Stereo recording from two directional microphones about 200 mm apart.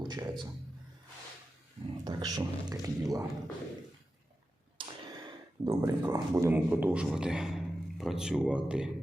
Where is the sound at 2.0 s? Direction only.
20° right (ahead or behind).